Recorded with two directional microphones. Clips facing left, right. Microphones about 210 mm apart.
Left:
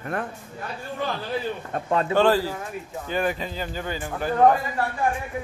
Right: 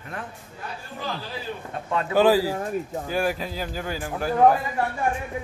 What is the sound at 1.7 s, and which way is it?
Speech, 40° left (ahead or behind).